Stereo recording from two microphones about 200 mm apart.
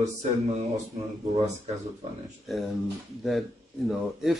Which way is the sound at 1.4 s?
35° right (ahead or behind).